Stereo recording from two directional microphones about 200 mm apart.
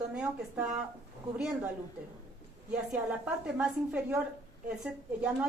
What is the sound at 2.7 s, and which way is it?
A woman's voice, 5° right (ahead or behind).